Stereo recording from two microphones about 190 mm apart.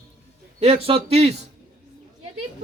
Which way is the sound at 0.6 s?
30° right (ahead or behind).